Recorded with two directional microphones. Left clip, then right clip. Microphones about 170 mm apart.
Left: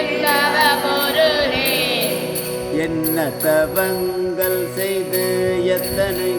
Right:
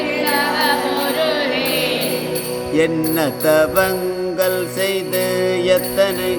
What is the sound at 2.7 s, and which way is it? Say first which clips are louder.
Jingle bell: right 4 dB; 40° right (ahead or behind).